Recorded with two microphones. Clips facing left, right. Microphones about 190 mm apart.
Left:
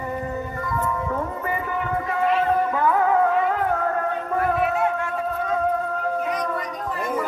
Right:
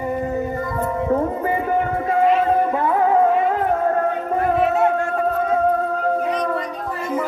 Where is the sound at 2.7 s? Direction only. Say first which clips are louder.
Right 3 dB; 25° right (ahead or behind).